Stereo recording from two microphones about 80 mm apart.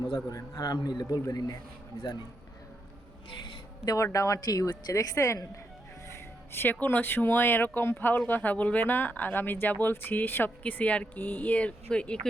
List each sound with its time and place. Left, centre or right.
0.3 s a man's voice: left
3.8 s a man's voice: left
6.1 s speech: left; by 12.3 s centre